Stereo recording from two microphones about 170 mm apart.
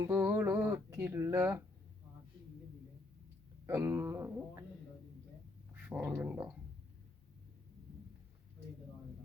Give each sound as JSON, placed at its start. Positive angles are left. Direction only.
{"t": 0.0, "sound": "speech", "side_deg": -15}
{"t": 3.7, "sound": "speech", "side_deg": -15}
{"t": 5.7, "sound": "speech", "side_deg": -10}